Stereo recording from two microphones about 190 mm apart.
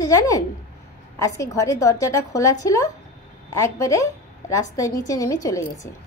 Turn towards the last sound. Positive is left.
turn(degrees=15)  # may be behind; listen again after turning